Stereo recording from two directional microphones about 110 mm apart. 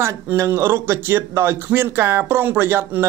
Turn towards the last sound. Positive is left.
turn(degrees=-20)  # may be behind; listen again after turning